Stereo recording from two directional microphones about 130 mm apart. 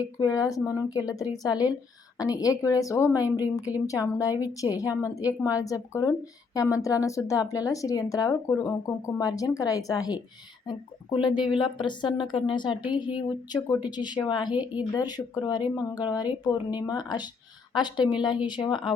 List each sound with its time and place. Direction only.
0.2 s a woman's voice: 30° left (ahead or behind)
14.5 s speech: 10° right (ahead or behind)
14.9 s a woman's voice: 30° left (ahead or behind)